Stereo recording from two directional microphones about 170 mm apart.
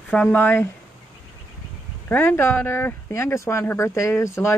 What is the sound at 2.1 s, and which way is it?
Speech, 15° left (ahead or behind).